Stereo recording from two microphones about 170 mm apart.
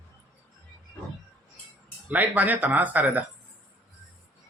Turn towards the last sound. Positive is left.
turn(degrees=-10)  # may be behind; listen again after turning